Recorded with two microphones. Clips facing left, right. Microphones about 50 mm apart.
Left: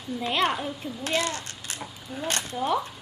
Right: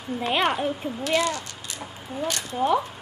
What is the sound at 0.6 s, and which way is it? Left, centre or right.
Speech, right.